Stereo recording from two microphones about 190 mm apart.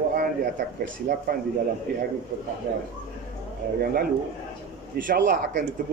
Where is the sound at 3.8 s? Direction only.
50° right (ahead or behind).